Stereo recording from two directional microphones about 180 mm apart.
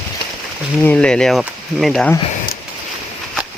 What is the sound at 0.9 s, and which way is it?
Speech, 5° left (ahead or behind).